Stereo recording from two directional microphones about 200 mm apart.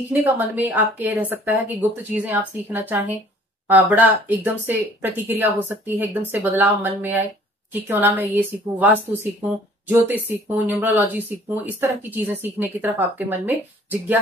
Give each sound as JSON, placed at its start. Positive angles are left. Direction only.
{"t": 0.1, "sound": "speech", "side_deg": -10}